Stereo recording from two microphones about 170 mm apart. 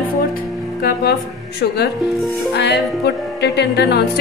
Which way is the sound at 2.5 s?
90° left.